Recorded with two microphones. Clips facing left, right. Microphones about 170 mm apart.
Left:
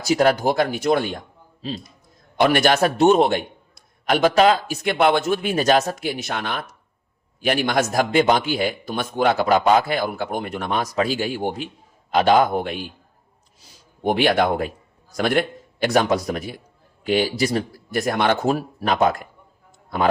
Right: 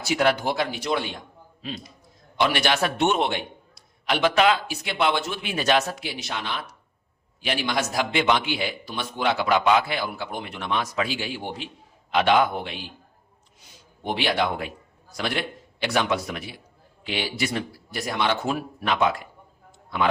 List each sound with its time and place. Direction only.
0.0 s a man's voice: 40° left (ahead or behind)
1.6 s a man's voice: 30° left (ahead or behind)
2.3 s a man's voice: 50° left (ahead or behind)
13.6 s a sound: 35° left (ahead or behind)
14.0 s a man's voice: 50° left (ahead or behind)